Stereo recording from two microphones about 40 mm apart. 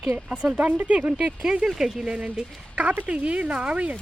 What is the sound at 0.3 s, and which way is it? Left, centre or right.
Speech, right.